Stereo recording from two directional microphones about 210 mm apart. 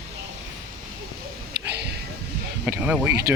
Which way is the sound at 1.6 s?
50° right (ahead or behind).